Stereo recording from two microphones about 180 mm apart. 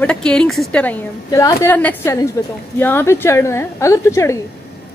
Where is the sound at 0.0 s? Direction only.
5° left (ahead or behind).